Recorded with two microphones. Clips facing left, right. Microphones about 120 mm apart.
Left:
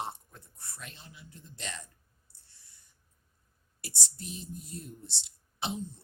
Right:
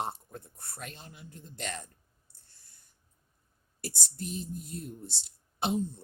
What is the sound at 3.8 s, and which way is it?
Speech, 45° right (ahead or behind).